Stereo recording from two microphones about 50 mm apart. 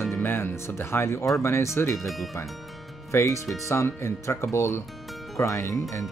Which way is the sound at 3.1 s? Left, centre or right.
Left.